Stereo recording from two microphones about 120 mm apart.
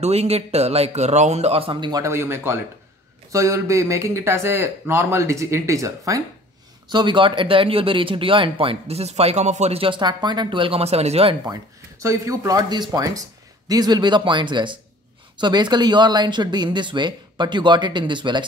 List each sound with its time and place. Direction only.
0.0 s speech: 60° right (ahead or behind); by 6.2 s 25° right (ahead or behind)
6.9 s speech: 40° right (ahead or behind); by 11.3 s 60° right (ahead or behind)
11.4 s speech: 30° right (ahead or behind)